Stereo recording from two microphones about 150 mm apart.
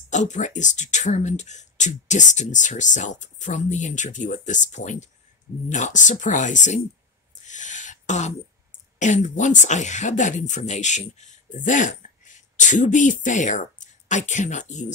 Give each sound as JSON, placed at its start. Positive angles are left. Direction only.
{"t": 0.1, "sound": "speech", "side_deg": 55}
{"t": 7.4, "sound": "throat clearing", "side_deg": 55}
{"t": 9.0, "sound": "speech", "side_deg": 55}